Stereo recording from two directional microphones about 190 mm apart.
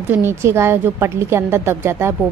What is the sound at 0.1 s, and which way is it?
Speech, 10° right (ahead or behind).